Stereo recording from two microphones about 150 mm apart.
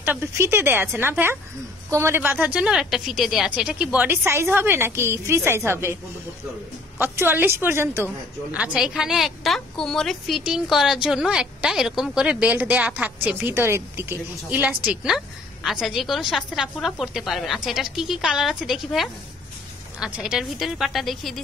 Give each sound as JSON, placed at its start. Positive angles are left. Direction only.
{"t": 0.0, "sound": "a woman's voice", "side_deg": -15}
{"t": 7.0, "sound": "a woman's voice", "side_deg": -15}